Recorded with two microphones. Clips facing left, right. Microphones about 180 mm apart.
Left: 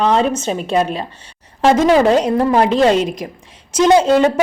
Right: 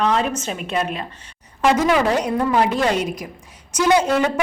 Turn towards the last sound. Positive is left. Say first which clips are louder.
# left 6 dB
turn(degrees=30)  # may be behind; listen again after turning